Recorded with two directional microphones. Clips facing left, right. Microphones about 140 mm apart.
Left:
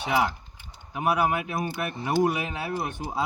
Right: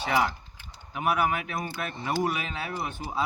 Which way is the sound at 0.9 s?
20° left (ahead or behind).